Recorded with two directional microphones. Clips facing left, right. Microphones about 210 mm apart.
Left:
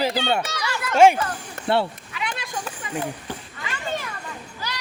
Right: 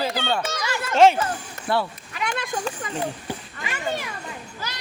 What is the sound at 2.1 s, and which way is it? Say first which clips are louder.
Children playing: right 3 dB; 45° right (ahead or behind).